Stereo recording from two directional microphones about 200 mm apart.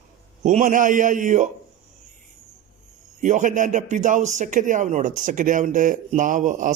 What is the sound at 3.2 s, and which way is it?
Speech, 40° right (ahead or behind).